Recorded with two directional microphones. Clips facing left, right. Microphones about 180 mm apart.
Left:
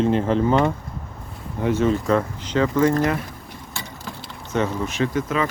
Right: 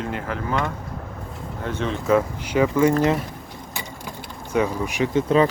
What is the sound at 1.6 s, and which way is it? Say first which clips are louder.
Speech: left 6 dB; 5° left (ahead or behind).